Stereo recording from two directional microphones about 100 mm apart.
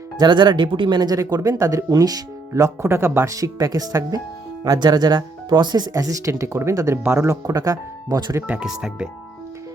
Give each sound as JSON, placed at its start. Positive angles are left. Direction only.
{"t": 0.2, "sound": "speech", "side_deg": -50}
{"t": 8.6, "sound": "speech", "side_deg": -5}